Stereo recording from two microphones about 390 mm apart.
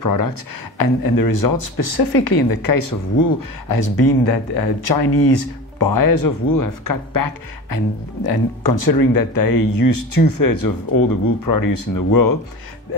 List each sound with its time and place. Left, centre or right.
0.0 s speech: left